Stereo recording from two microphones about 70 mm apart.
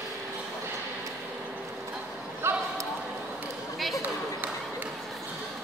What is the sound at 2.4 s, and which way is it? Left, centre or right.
Basketball bounce, right.